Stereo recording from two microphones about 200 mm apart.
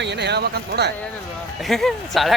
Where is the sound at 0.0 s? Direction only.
60° right (ahead or behind).